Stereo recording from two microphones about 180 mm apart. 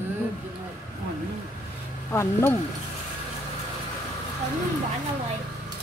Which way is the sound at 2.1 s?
15° left (ahead or behind).